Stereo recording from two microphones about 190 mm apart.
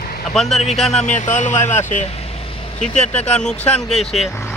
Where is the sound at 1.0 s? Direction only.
40° left (ahead or behind).